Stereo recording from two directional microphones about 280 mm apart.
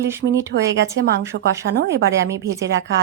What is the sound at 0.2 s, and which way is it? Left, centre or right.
Speech, right.